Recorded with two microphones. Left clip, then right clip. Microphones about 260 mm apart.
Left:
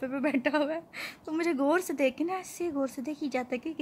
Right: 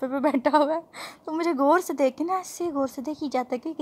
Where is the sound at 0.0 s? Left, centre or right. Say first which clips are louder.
Right 6 dB; centre.